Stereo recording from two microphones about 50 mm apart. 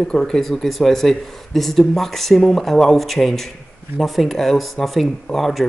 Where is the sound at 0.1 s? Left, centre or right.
Centre.